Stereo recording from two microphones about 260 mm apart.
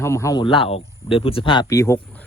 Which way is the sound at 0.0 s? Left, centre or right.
Centre.